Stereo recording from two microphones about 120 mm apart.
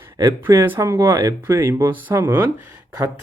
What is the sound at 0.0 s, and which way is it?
Speech, 25° right (ahead or behind).